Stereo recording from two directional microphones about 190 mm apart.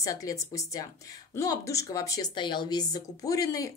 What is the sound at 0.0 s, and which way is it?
A woman's voice, 15° left (ahead or behind).